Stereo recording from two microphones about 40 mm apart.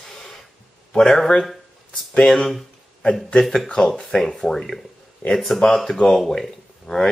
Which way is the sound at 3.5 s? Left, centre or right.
Centre.